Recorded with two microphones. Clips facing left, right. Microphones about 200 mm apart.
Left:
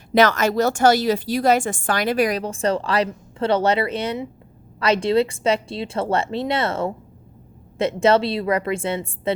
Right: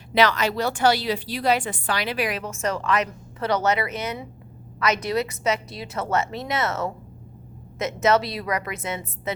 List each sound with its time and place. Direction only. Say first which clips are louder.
0.1 s a woman's voice: left 4 dB; 45° left (ahead or behind); by 9.3 s 30° left (ahead or behind)